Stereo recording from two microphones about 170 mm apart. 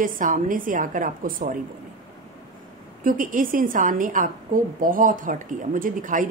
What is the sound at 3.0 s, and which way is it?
Speech, 50° right (ahead or behind).